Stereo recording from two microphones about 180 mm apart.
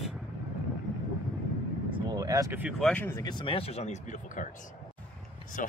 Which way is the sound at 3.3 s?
30° left (ahead or behind).